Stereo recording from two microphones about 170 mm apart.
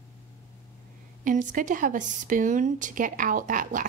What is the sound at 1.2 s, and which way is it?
A woman's voice, 50° right (ahead or behind).